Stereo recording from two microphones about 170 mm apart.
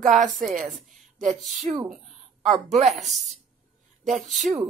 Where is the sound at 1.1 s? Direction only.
45° right (ahead or behind).